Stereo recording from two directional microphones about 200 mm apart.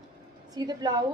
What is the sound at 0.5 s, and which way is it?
Speech, 20° right (ahead or behind).